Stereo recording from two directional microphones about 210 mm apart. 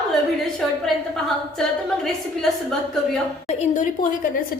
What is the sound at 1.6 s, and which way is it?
Speech, centre (ahead or behind).